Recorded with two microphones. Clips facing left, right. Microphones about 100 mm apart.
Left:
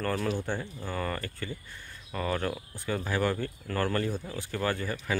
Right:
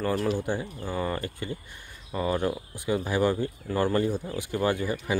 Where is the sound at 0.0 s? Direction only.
10° right (ahead or behind).